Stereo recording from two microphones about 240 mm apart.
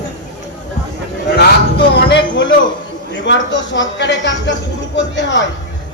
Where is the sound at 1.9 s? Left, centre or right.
Left.